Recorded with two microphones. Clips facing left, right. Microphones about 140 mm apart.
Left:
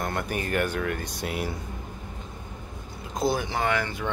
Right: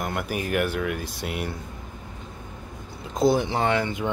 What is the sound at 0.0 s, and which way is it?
Speech, 5° right (ahead or behind).